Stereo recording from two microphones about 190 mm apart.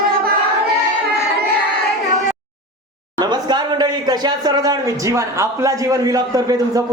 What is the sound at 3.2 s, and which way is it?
Speech, 20° right (ahead or behind).